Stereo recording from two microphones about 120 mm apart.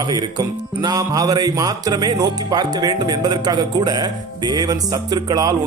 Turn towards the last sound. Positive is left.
turn(degrees=-35)  # may be behind; listen again after turning